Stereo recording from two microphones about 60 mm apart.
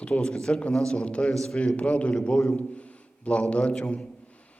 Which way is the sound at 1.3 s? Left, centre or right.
Centre.